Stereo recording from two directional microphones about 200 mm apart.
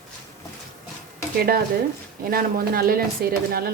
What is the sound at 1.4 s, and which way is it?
A woman's voice, 50° right (ahead or behind).